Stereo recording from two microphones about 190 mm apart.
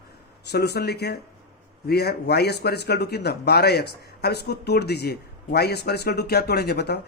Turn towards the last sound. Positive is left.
turn(degrees=60)  # may be behind; listen again after turning